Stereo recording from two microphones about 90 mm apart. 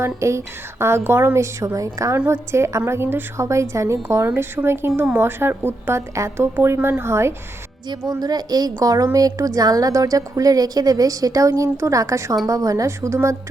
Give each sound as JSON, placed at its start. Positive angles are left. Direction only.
{"t": 0.0, "sound": "a woman's voice", "side_deg": -30}
{"t": 7.9, "sound": "a woman's voice", "side_deg": -45}